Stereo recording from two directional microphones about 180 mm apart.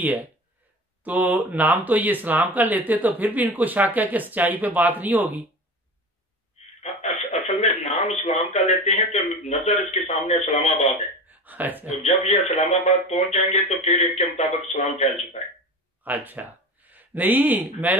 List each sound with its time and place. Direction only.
0.0 s speech: 10° right (ahead or behind)
6.8 s a sound: 35° left (ahead or behind)
7.6 s a man's voice: 35° left (ahead or behind)
11.2 s a sound: 10° right (ahead or behind)
12.0 s a man's voice: 35° left (ahead or behind)
16.0 s speech: 10° right (ahead or behind)